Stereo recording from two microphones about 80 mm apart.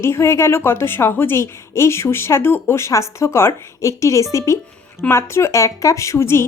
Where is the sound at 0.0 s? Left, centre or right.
Left.